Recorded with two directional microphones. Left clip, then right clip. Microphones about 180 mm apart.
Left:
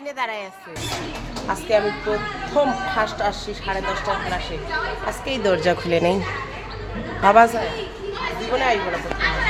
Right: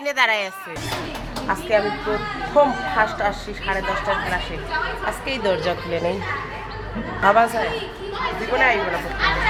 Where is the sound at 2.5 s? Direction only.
5° left (ahead or behind).